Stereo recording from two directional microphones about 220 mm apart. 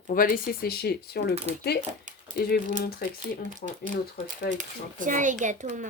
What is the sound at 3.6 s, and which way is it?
Speech, 35° left (ahead or behind).